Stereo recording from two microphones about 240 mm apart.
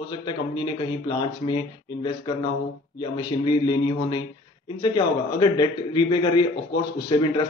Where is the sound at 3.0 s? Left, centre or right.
Centre.